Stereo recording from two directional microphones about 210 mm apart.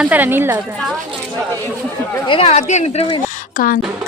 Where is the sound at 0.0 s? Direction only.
10° right (ahead or behind).